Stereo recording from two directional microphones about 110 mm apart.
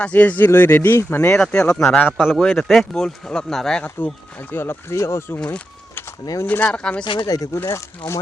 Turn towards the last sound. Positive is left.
turn(degrees=25)  # may be behind; listen again after turning